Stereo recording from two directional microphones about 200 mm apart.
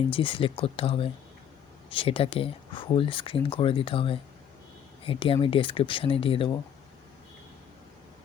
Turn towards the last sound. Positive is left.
turn(degrees=25)  # may be behind; listen again after turning